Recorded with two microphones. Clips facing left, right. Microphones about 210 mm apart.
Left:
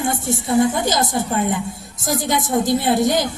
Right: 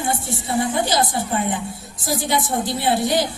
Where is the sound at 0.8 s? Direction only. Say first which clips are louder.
Left 1 dB; 45° left (ahead or behind).